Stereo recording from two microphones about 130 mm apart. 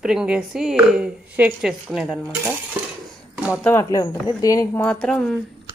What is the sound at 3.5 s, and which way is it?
Speech, 20° left (ahead or behind).